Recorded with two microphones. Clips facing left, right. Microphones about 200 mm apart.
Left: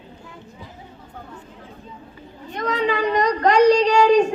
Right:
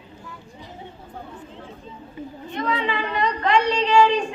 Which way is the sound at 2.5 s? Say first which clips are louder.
Left 3 dB; 40° left (ahead or behind).